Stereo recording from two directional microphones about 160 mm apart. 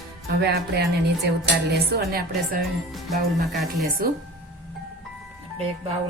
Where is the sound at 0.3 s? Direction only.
90° right.